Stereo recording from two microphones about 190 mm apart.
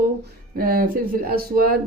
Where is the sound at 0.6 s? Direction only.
50° right (ahead or behind).